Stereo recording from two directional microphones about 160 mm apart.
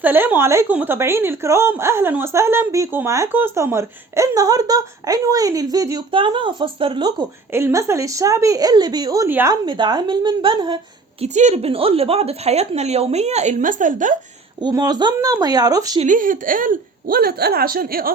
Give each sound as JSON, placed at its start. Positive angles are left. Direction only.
{"t": 0.0, "sound": "a woman's voice", "side_deg": -10}
{"t": 6.1, "sound": "a woman's voice", "side_deg": -30}
{"t": 7.5, "sound": "a woman's voice", "side_deg": -15}
{"t": 9.6, "sound": "a woman's voice", "side_deg": -30}
{"t": 11.2, "sound": "a woman's voice", "side_deg": -45}
{"t": 14.6, "sound": "a woman's voice", "side_deg": -25}
{"t": 16.0, "sound": "a woman's voice", "side_deg": -55}